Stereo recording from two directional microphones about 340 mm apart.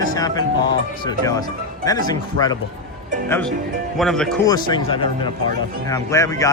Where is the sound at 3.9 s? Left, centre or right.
Centre.